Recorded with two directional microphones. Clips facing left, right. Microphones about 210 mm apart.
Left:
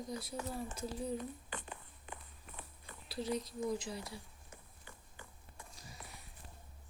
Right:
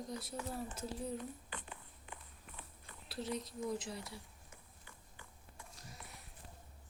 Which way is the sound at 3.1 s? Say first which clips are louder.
Left 3 dB; centre (ahead or behind).